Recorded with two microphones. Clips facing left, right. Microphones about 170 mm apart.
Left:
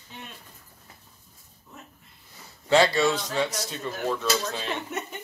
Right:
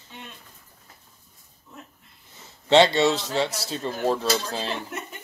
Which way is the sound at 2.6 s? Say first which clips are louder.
Right 3 dB; 25° right (ahead or behind).